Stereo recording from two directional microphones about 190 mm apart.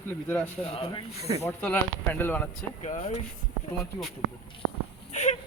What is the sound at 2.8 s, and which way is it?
Speech, 35° left (ahead or behind).